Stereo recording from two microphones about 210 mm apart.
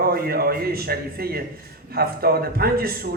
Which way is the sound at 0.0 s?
45° right (ahead or behind).